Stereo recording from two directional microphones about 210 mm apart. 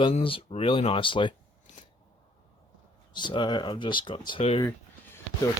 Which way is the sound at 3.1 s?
20° left (ahead or behind).